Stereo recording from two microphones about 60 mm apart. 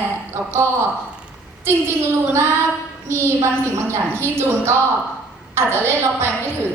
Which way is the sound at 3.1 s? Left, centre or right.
Right.